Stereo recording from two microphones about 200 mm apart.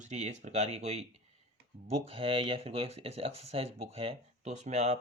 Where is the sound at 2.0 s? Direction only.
30° right (ahead or behind).